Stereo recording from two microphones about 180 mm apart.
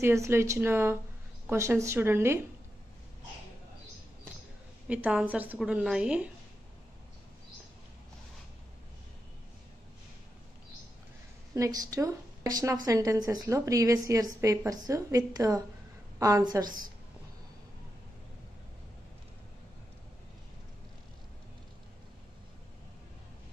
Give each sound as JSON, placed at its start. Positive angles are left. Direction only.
{"t": 0.0, "sound": "a woman's voice", "side_deg": -15}
{"t": 4.8, "sound": "a woman's voice", "side_deg": -5}
{"t": 11.5, "sound": "a woman's voice", "side_deg": -20}